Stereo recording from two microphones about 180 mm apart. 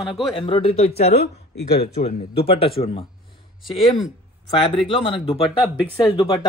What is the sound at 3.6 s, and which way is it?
Speech, centre (ahead or behind).